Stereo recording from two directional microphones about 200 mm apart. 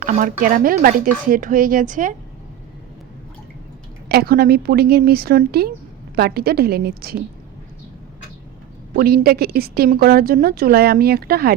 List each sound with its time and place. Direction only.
0.0 s a woman's voice: 45° right (ahead or behind)
4.1 s a woman's voice: 50° right (ahead or behind)
9.0 s a woman's voice: 50° right (ahead or behind)